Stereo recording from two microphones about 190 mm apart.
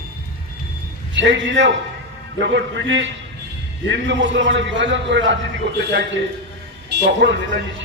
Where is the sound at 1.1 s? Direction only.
75° right (ahead or behind).